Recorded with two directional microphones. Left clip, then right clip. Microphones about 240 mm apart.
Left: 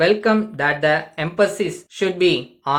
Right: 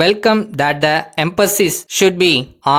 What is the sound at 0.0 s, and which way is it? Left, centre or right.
Speech, right.